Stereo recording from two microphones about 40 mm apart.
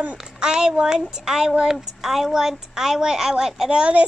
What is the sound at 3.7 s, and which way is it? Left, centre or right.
Speech, right.